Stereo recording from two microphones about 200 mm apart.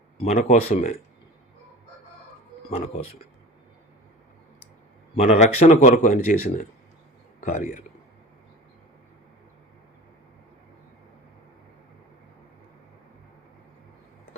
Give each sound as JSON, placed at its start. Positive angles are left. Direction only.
{"t": 0.2, "sound": "speech", "side_deg": 35}
{"t": 2.6, "sound": "speech", "side_deg": 30}
{"t": 5.1, "sound": "speech", "side_deg": 30}
{"t": 7.4, "sound": "speech", "side_deg": 35}